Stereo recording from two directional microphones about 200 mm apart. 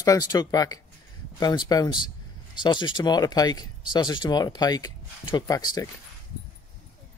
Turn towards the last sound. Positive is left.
turn(degrees=20)  # may be behind; listen again after turning